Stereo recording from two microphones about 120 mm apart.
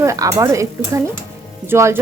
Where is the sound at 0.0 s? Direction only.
25° right (ahead or behind).